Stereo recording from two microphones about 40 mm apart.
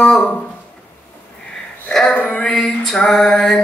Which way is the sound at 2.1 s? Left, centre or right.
Left.